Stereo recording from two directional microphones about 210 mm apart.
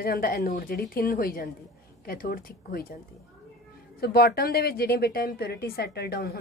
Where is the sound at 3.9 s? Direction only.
50° left (ahead or behind).